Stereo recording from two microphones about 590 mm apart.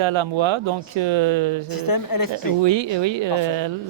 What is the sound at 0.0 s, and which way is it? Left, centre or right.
Speech, right.